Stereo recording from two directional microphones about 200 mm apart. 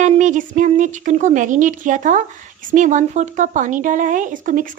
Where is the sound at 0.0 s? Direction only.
40° right (ahead or behind).